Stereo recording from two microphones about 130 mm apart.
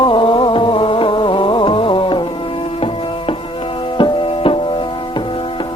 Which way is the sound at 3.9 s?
40° left (ahead or behind).